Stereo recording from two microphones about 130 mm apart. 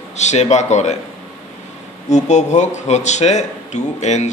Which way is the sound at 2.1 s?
60° left (ahead or behind).